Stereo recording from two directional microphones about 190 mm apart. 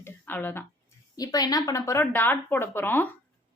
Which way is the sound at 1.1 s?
20° left (ahead or behind).